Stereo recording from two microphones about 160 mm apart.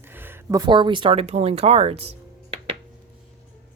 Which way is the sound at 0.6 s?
30° right (ahead or behind).